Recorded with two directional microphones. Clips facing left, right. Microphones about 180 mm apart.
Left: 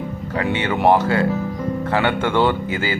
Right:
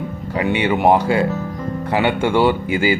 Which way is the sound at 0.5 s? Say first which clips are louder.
Right 1 dB; 15° right (ahead or behind).